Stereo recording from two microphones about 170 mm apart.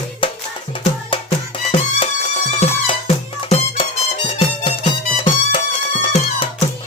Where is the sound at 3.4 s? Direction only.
30° left (ahead or behind).